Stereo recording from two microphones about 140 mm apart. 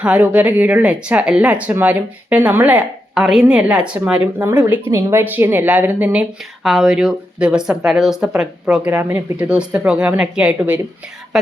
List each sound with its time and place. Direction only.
0.0 s speech: 10° right (ahead or behind)